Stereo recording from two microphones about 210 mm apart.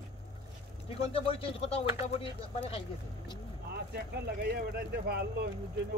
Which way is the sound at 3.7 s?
50° right (ahead or behind).